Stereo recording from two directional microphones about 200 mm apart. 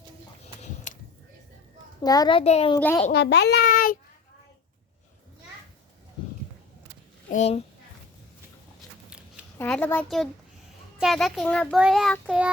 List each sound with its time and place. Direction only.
0.9 s a sound: 40° left (ahead or behind)
2.0 s a child's voice: 20° left (ahead or behind)
2.7 s a child's voice: 15° left (ahead or behind)
3.1 s a child's voice: 55° left (ahead or behind)
7.3 s a child's voice: 35° left (ahead or behind)
9.0 s a sound: 5° right (ahead or behind)
9.6 s a child's voice: 5° left (ahead or behind)